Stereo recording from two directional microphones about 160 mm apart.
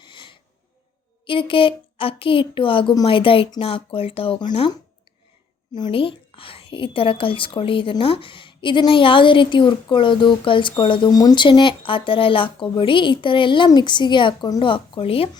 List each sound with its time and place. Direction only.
0.0 s snort: 30° left (ahead or behind)
1.3 s a woman's voice: 35° left (ahead or behind)